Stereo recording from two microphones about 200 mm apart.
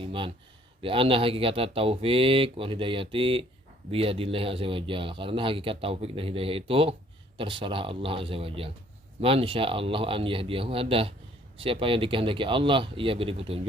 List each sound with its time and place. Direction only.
0.0 s a man's voice: 25° right (ahead or behind)